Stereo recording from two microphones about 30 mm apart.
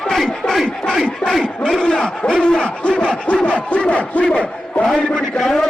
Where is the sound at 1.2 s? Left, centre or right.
Left.